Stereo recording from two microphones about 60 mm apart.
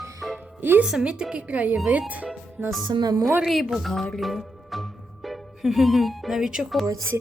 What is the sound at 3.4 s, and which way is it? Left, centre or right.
Speech, centre.